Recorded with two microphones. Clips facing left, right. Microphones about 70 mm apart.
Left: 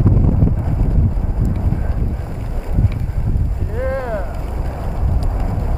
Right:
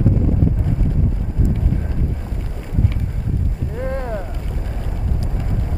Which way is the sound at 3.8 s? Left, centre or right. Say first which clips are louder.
Left 4 dB; left.